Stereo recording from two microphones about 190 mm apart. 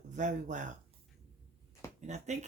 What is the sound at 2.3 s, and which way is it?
Speech, 35° right (ahead or behind).